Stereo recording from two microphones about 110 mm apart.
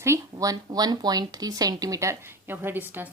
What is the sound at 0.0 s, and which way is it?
A woman's voice, 30° right (ahead or behind).